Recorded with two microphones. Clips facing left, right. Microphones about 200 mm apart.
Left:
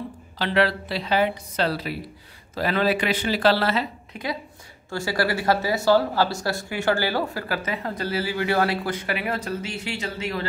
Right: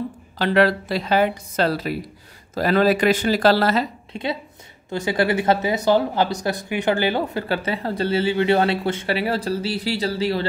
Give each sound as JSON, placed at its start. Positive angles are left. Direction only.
{"t": 0.4, "sound": "a woman's voice", "side_deg": -45}
{"t": 4.1, "sound": "speech", "side_deg": -25}